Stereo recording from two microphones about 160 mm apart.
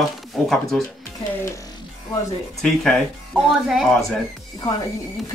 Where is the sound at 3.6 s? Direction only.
Centre (ahead or behind).